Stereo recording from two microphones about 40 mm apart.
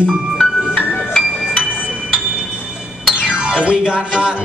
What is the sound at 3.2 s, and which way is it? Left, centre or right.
Music, right.